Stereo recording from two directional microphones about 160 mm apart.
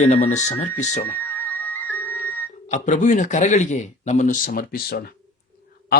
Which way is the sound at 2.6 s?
50° left (ahead or behind).